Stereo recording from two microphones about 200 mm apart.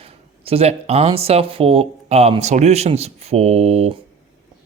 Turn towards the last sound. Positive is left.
turn(degrees=-30)  # may be behind; listen again after turning